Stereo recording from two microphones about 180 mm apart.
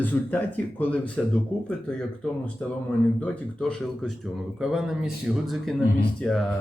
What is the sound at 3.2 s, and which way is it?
Speech, 5° left (ahead or behind).